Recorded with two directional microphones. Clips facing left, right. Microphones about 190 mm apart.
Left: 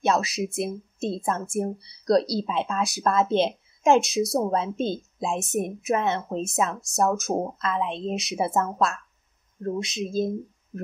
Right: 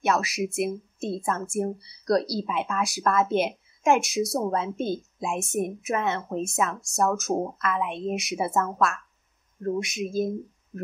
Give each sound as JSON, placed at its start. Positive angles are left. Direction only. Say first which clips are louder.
{"t": 0.0, "sound": "a woman's voice", "louder": "left 1 dB", "side_deg": 25}